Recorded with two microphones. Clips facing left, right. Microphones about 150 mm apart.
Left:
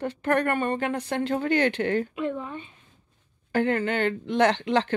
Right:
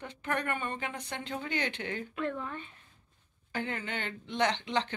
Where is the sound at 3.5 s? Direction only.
60° left (ahead or behind).